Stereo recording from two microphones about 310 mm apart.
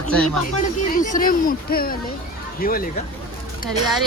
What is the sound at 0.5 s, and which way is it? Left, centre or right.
Speech, left.